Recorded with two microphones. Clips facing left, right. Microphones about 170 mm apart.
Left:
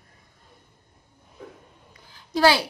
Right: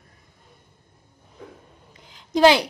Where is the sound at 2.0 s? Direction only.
20° right (ahead or behind).